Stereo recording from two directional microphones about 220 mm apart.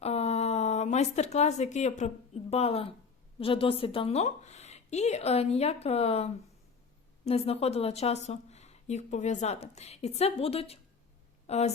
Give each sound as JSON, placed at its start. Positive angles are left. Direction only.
{"t": 0.0, "sound": "a woman's voice", "side_deg": 30}